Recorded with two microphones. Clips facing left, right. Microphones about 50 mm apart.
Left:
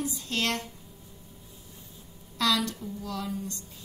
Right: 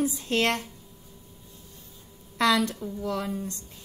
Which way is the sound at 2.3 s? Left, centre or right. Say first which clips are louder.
Right 4 dB; right.